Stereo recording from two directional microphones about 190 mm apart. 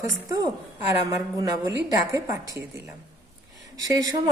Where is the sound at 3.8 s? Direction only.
20° right (ahead or behind).